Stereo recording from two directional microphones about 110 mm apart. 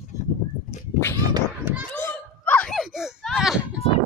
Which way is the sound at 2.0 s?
15° left (ahead or behind).